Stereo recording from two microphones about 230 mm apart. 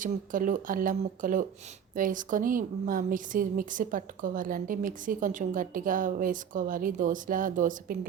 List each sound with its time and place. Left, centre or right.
0.0 s a woman's voice: right